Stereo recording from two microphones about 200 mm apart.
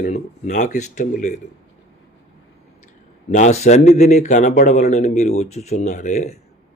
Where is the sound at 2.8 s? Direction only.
35° left (ahead or behind).